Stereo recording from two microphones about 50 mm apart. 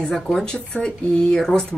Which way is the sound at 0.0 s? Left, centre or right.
Centre.